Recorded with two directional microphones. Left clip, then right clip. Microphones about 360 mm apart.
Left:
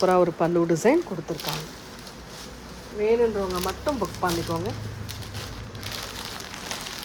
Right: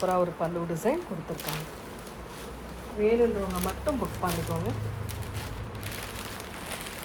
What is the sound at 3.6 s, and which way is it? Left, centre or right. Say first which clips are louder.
Speech: left 3 dB; left.